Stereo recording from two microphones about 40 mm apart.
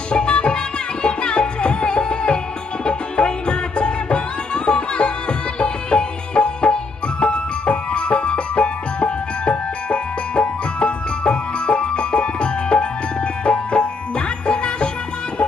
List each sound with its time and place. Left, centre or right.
0.1 s music: left